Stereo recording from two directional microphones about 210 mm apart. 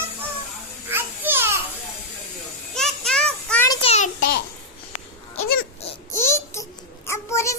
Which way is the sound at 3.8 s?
30° left (ahead or behind).